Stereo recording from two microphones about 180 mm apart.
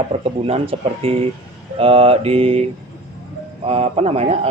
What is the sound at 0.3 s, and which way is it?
Speech, 30° right (ahead or behind).